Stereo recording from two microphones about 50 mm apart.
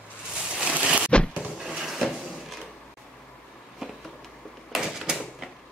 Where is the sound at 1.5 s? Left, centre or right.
Centre.